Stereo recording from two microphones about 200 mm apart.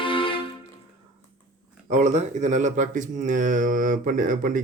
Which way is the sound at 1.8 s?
35° right (ahead or behind).